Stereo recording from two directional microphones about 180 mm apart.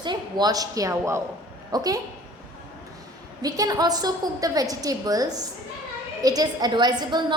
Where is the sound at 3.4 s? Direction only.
20° right (ahead or behind).